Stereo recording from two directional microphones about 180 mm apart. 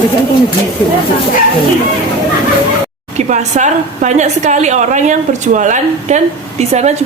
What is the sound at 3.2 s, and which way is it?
A woman's voice, 40° right (ahead or behind).